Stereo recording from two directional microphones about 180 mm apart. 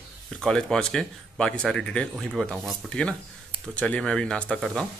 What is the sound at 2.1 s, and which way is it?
Speech, 5° right (ahead or behind).